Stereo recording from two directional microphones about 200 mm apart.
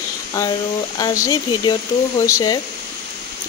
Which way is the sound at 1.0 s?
15° left (ahead or behind).